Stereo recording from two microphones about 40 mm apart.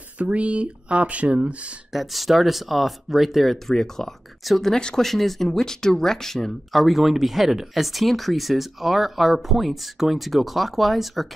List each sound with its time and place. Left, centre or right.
0.2 s speech: right
1.9 s speech: centre
3.6 s speech: centre
4.7 s speech: centre
5.0 s speech: centre